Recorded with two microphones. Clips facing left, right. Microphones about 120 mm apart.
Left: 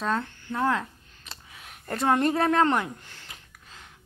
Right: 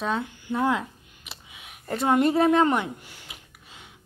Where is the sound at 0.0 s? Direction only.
10° right (ahead or behind).